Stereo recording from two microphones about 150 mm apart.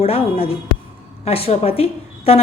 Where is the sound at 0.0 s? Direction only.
40° left (ahead or behind).